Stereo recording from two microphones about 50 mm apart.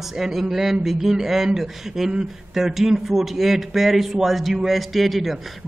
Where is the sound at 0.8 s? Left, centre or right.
Centre.